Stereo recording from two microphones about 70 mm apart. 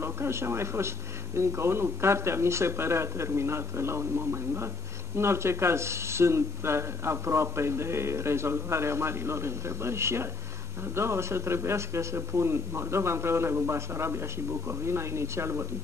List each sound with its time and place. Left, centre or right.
0.0 s speech: right